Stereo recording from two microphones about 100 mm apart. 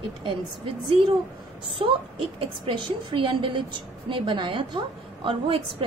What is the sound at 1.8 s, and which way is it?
A woman's voice, 70° right (ahead or behind).